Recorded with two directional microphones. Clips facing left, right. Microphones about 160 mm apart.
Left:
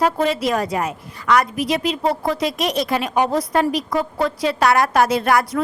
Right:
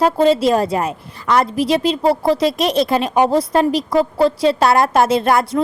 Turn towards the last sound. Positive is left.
turn(degrees=-25)  # may be behind; listen again after turning